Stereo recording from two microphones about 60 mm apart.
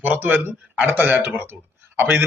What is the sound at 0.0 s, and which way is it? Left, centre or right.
A man's voice, right.